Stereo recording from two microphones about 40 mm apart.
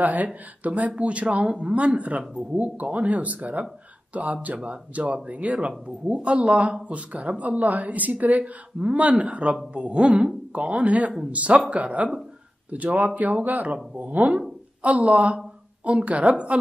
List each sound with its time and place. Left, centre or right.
0.0 s a woman's voice: right